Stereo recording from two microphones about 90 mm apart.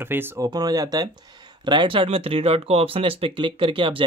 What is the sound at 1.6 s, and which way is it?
Speech, 65° right (ahead or behind).